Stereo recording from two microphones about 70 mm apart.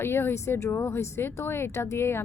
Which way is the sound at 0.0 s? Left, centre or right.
Left.